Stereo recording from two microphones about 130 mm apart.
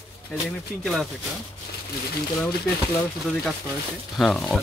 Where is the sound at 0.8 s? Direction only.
Centre (ahead or behind).